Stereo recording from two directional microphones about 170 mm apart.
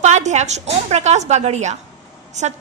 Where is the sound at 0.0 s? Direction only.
45° right (ahead or behind).